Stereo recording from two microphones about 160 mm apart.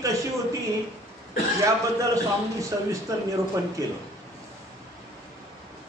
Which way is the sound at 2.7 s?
20° right (ahead or behind).